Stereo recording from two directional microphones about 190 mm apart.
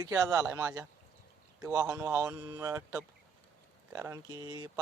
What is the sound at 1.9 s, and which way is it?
Speech, 10° right (ahead or behind).